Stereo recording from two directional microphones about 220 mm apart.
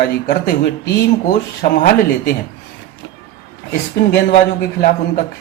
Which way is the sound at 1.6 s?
40° left (ahead or behind).